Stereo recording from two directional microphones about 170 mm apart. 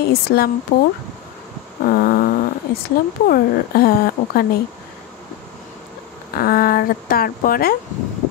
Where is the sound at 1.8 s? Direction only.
60° left (ahead or behind).